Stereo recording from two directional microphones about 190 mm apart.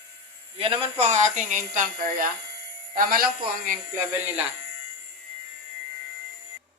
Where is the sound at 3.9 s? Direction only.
10° right (ahead or behind).